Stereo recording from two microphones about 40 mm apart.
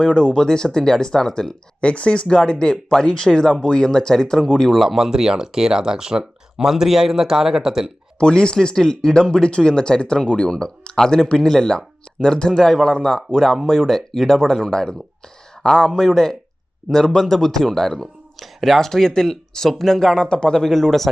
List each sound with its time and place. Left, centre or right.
0.0 s speech: left
1.8 s speech: left
4.7 s speech: centre
4.9 s speech: centre
8.2 s speech: centre
18.3 s speech: centre
20.2 s speech: left
20.7 s speech: centre